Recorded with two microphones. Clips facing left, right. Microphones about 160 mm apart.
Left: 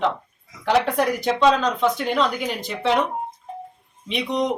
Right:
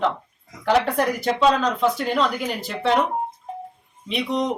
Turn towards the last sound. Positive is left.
turn(degrees=-5)  # may be behind; listen again after turning